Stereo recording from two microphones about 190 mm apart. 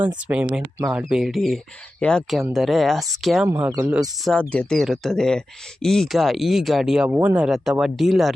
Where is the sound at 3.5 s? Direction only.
15° right (ahead or behind).